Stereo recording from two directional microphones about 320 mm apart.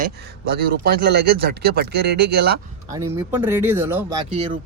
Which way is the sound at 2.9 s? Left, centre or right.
Centre.